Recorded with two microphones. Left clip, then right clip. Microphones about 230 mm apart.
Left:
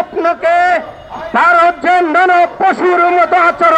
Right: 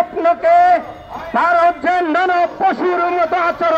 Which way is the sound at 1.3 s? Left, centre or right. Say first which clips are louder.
Left 4 dB; left.